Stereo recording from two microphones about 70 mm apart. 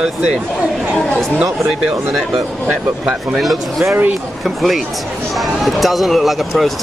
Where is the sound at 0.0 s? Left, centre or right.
Centre.